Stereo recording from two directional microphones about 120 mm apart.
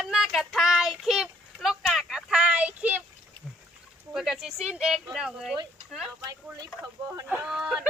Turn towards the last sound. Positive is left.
turn(degrees=-5)  # may be behind; listen again after turning